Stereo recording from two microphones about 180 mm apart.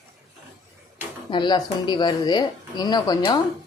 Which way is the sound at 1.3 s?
25° left (ahead or behind).